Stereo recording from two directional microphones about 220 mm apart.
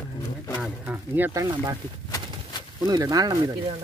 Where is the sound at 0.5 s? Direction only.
5° right (ahead or behind).